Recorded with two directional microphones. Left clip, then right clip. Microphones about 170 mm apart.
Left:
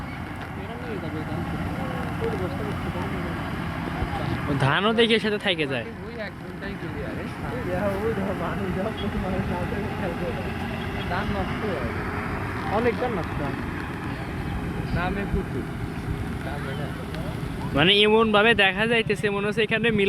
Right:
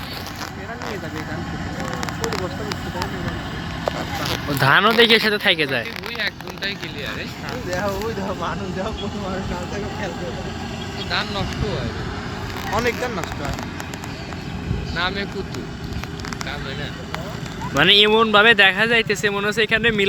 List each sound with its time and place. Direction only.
4.6 s speech: centre (ahead or behind)
14.9 s speech: 50° left (ahead or behind)
17.7 s speech: 5° left (ahead or behind)